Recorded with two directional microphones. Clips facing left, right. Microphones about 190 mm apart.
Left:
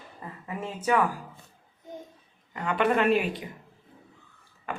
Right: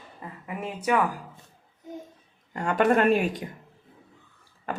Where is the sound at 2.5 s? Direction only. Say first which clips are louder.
Right 3 dB; 45° right (ahead or behind).